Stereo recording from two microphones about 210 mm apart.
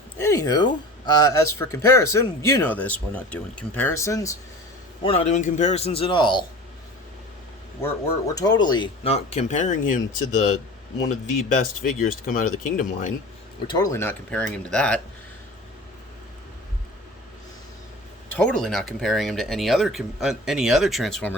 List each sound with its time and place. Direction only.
0.2 s speech: 15° left (ahead or behind)
5.0 s speech: 30° left (ahead or behind)
8.4 s speech: 20° left (ahead or behind); by 10.0 s 35° left (ahead or behind)
11.1 s speech: 40° left (ahead or behind)
13.7 s speech: 15° left (ahead or behind)
18.3 s speech: 5° left (ahead or behind)